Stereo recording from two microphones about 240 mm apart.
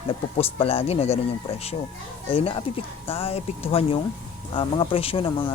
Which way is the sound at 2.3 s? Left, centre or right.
Left.